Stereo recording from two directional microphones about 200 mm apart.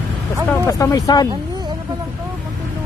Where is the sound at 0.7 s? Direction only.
15° left (ahead or behind).